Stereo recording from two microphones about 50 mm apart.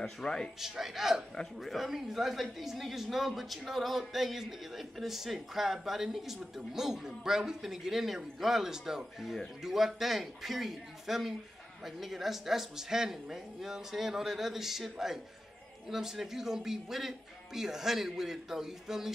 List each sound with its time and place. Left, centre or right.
0.0 s speech: centre
0.6 s speech: centre